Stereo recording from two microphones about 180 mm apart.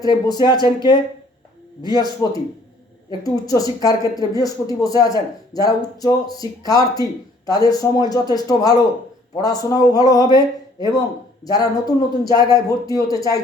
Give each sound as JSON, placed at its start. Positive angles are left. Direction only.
{"t": 0.0, "sound": "a woman's voice", "side_deg": 20}
{"t": 11.4, "sound": "a woman's voice", "side_deg": 20}